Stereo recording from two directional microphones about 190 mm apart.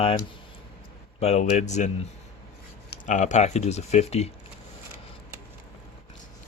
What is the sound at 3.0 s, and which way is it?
Speech, 40° left (ahead or behind).